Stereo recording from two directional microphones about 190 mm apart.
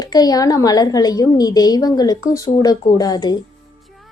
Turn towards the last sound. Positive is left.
turn(degrees=20)  # may be behind; listen again after turning